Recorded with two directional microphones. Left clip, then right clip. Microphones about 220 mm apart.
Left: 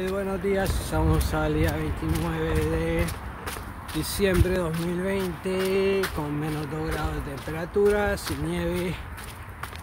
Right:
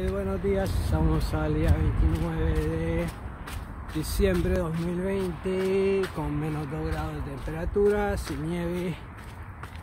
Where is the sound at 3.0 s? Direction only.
15° left (ahead or behind).